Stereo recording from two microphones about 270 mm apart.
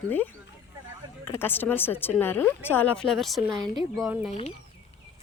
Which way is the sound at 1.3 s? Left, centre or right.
Centre.